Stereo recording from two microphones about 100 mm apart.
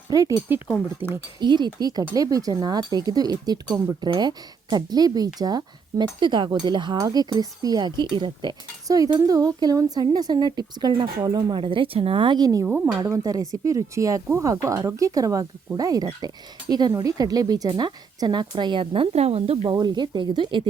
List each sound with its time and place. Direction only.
0.1 s speech: 35° right (ahead or behind)
1.0 s speech: 20° right (ahead or behind)
1.4 s speech: 50° right (ahead or behind)
6.9 s speech: 40° right (ahead or behind)
8.9 s speech: 35° right (ahead or behind)
12.6 s speech: 15° right (ahead or behind)
13.0 s speech: 35° right (ahead or behind); by 19.5 s 85° right
19.7 s speech: 45° right (ahead or behind)